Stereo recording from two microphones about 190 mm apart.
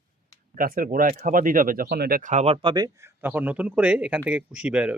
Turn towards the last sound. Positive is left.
turn(degrees=-5)  # may be behind; listen again after turning